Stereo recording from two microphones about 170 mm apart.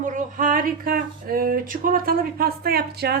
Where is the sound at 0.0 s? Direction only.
50° right (ahead or behind).